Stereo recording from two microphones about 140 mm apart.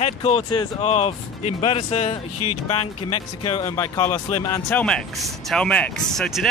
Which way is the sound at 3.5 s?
20° left (ahead or behind).